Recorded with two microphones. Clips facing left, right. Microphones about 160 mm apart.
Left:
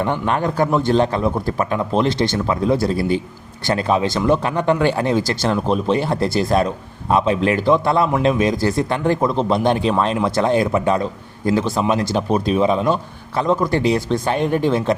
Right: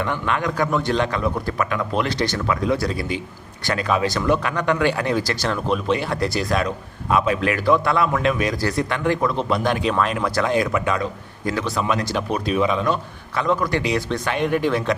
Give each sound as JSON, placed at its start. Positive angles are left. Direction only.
{"t": 0.0, "sound": "a man's voice", "side_deg": 35}